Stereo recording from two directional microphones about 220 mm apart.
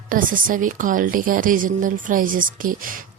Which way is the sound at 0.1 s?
40° right (ahead or behind).